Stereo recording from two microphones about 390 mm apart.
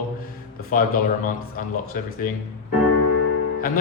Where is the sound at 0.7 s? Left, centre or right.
Centre.